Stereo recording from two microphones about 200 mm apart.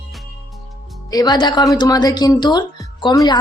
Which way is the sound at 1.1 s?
20° left (ahead or behind).